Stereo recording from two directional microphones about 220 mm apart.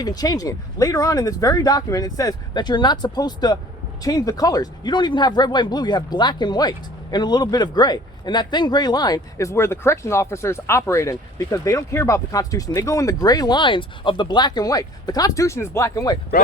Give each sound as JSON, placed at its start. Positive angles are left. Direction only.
{"t": 0.0, "sound": "speech", "side_deg": 15}